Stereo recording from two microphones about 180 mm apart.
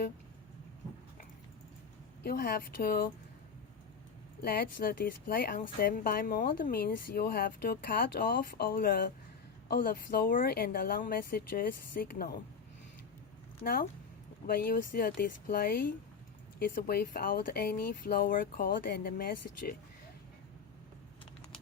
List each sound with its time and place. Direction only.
2.2 s speech: 55° left (ahead or behind)
4.4 s speech: 55° left (ahead or behind)
14.4 s speech: 55° left (ahead or behind)